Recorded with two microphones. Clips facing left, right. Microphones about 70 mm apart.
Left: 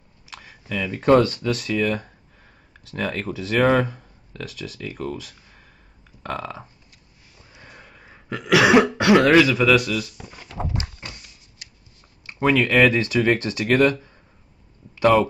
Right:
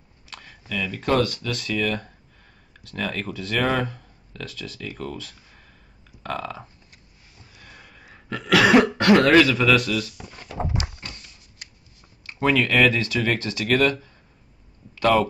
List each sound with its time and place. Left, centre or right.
0.3 s a sound: centre
0.9 s speech: left
1.5 s speech: centre
7.5 s sniff: centre
8.1 s speech: centre
11.0 s a sound: centre
11.6 s shuffling cards: right
12.3 s speech: centre